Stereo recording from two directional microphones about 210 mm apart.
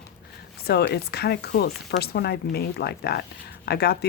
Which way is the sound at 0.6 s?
50° left (ahead or behind).